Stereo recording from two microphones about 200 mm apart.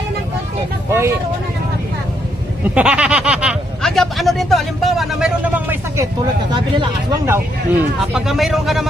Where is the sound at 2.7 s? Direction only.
5° right (ahead or behind).